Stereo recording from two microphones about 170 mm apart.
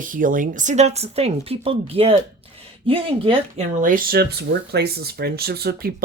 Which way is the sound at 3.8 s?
55° right (ahead or behind).